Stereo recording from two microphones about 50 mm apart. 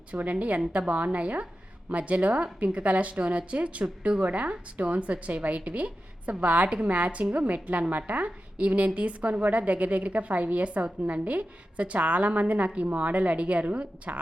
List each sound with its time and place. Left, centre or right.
0.1 s a woman's voice: right